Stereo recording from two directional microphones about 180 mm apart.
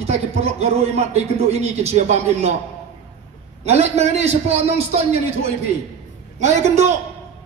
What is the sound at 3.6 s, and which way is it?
A man's voice, 35° right (ahead or behind).